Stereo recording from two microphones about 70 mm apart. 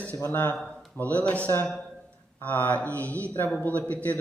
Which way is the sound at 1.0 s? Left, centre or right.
Left.